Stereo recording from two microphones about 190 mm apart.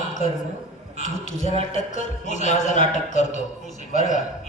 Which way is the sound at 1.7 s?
40° left (ahead or behind).